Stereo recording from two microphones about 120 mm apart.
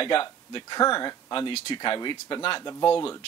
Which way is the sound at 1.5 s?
55° left (ahead or behind).